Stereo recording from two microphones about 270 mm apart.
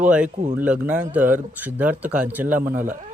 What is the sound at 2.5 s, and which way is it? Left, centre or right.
Speech, right.